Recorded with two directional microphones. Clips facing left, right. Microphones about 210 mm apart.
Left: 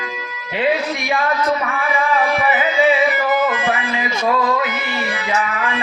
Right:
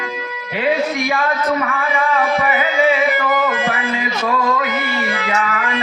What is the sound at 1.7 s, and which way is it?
Music, 15° left (ahead or behind).